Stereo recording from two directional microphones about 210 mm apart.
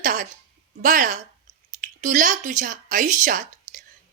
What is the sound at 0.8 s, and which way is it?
A woman's voice, 40° right (ahead or behind).